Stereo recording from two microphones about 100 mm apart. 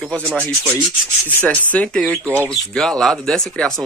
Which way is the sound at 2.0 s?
20° right (ahead or behind).